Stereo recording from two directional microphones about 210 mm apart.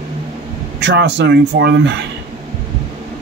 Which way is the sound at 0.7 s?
55° right (ahead or behind).